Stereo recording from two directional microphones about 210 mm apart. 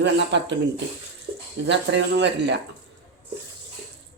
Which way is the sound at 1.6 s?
55° right (ahead or behind).